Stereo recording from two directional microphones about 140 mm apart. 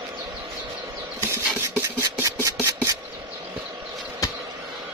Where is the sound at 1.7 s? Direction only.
20° right (ahead or behind).